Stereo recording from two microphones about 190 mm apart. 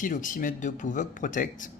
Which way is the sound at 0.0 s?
45° left (ahead or behind).